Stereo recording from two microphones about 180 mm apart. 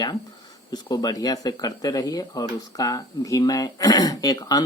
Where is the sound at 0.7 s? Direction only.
20° left (ahead or behind).